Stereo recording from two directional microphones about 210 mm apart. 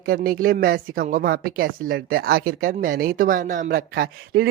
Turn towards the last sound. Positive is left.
turn(degrees=-50)  # may be behind; listen again after turning